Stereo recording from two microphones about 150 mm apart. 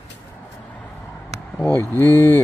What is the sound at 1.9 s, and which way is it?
Speech, 15° left (ahead or behind).